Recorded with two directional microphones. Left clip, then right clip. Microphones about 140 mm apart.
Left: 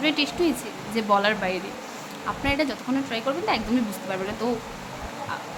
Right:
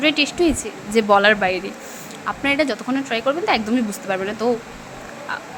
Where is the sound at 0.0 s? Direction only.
35° right (ahead or behind).